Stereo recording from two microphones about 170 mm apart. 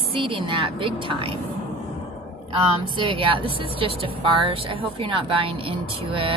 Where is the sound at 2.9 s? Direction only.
30° right (ahead or behind).